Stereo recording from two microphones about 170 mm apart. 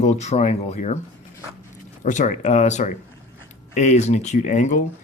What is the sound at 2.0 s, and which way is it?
Speech, 45° left (ahead or behind).